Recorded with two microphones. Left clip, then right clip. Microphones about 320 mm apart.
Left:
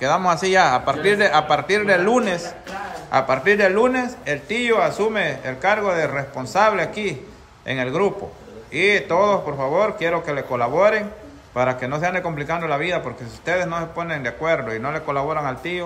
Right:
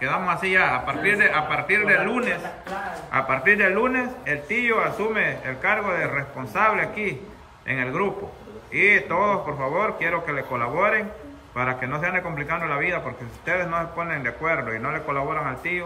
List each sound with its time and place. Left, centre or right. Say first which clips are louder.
0.0 s a man's voice: left 5 dB; centre